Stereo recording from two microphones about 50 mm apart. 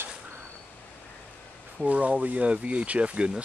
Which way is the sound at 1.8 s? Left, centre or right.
Right.